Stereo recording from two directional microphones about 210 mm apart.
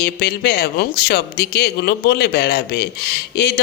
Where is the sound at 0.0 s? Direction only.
45° left (ahead or behind).